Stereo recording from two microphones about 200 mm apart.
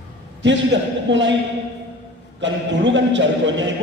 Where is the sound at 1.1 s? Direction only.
65° right (ahead or behind).